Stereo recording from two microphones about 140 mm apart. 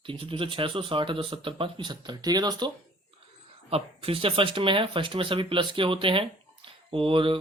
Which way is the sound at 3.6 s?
45° right (ahead or behind).